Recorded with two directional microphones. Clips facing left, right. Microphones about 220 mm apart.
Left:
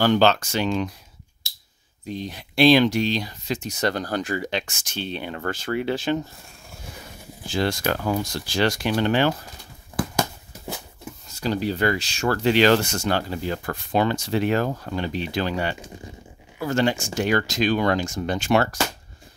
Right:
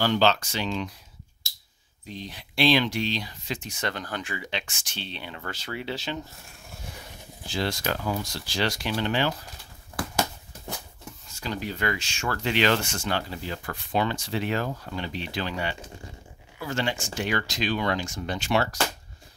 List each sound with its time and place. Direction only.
0.0 s speech: 50° left (ahead or behind)
2.0 s speech: 45° left (ahead or behind)
7.4 s speech: 50° left (ahead or behind)
11.2 s speech: 35° left (ahead or behind)